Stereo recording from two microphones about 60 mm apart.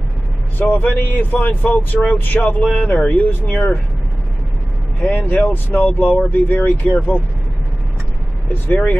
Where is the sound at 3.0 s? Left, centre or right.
Left.